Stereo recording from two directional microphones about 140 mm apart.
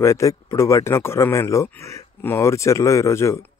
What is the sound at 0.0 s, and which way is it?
Speech, 20° left (ahead or behind).